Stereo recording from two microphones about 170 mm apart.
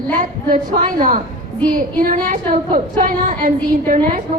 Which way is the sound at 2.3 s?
50° right (ahead or behind).